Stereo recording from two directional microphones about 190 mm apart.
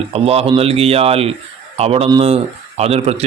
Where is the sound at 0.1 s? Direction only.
30° right (ahead or behind).